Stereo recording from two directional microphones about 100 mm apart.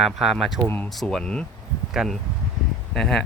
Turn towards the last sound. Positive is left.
turn(degrees=5)  # may be behind; listen again after turning